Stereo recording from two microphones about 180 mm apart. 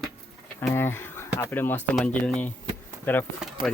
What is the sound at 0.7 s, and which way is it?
Speech, 10° left (ahead or behind).